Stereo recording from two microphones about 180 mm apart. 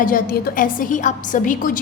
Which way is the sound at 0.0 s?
55° left (ahead or behind).